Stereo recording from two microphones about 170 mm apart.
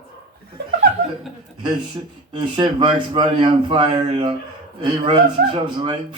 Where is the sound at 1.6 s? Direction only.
30° right (ahead or behind).